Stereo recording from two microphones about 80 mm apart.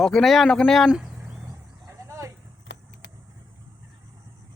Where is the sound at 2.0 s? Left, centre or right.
Right.